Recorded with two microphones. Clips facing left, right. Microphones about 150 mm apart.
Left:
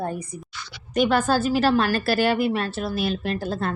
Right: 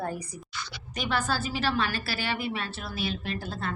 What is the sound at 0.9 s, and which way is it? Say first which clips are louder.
A woman's voice: left 10 dB; 50° left (ahead or behind).